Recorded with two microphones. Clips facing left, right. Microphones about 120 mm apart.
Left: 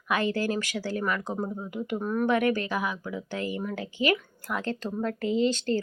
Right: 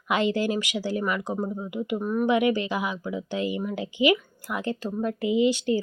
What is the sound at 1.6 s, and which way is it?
A woman's voice, 10° right (ahead or behind).